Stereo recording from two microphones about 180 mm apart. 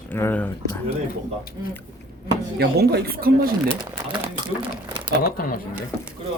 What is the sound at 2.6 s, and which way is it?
Speech, 65° right (ahead or behind).